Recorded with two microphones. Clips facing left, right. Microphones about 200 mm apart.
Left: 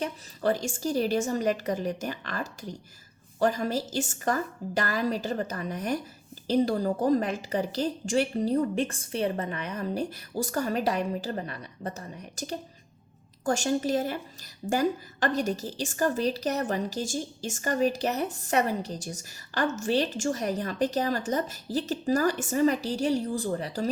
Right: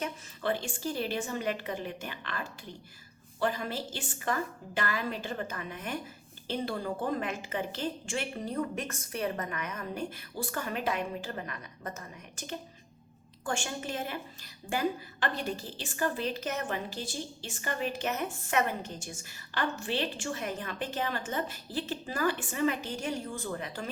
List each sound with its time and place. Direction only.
0.0 s a woman's voice: 40° left (ahead or behind)